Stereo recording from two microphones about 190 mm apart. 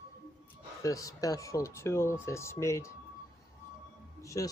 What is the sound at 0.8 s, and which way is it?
Speech, 20° left (ahead or behind).